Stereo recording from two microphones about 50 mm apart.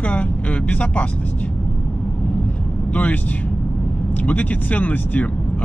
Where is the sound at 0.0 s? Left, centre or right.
Left.